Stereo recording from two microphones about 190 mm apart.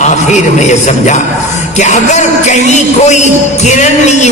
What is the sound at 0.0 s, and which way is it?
Speech, 40° left (ahead or behind).